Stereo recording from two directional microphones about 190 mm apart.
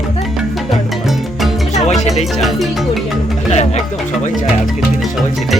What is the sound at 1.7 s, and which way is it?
Music, 35° left (ahead or behind).